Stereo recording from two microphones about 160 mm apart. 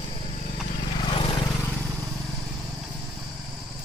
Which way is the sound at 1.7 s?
5° left (ahead or behind).